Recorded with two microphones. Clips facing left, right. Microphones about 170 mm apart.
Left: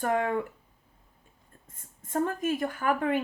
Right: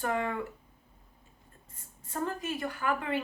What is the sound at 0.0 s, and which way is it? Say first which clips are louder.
Speech: left 4 dB; 50° left (ahead or behind).